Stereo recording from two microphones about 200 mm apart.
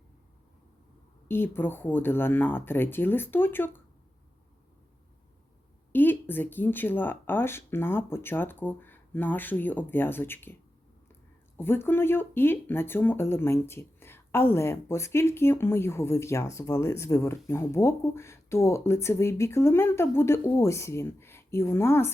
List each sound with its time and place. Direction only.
1.3 s speech: 10° left (ahead or behind)
5.9 s speech: 10° left (ahead or behind)